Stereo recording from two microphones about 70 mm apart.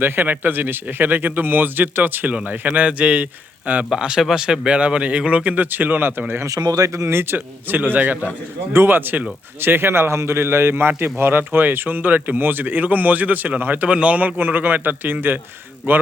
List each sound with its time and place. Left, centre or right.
0.0 s speech: right
6.6 s a man's voice: right